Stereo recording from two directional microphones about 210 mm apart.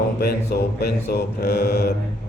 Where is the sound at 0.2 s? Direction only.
50° left (ahead or behind).